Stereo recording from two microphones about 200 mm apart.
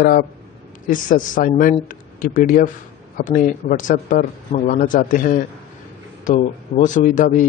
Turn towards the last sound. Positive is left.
turn(degrees=40)  # may be behind; listen again after turning